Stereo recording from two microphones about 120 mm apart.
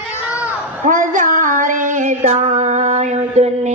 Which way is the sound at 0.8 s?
90° right.